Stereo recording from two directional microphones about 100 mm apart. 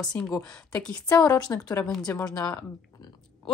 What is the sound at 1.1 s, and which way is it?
A woman's voice, 40° left (ahead or behind).